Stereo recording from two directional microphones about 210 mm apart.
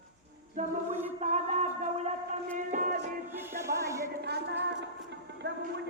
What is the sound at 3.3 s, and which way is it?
Music, 10° right (ahead or behind).